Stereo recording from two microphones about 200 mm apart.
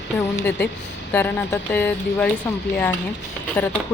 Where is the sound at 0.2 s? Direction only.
10° left (ahead or behind).